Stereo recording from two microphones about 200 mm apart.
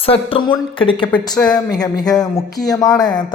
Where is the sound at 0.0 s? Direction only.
25° left (ahead or behind).